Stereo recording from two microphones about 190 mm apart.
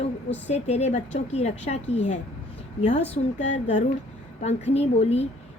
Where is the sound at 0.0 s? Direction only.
35° left (ahead or behind).